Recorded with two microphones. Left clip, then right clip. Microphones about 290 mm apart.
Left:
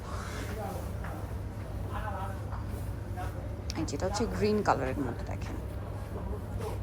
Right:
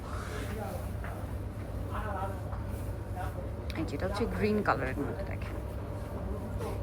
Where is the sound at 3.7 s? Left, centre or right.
Centre.